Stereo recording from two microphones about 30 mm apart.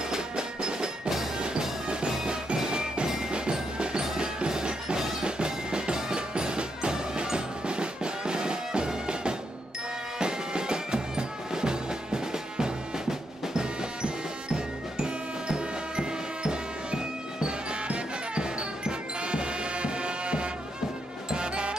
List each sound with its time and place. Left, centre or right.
0.1 s music: right
2.2 s music: right
3.5 s wood block: right
4.2 s music: right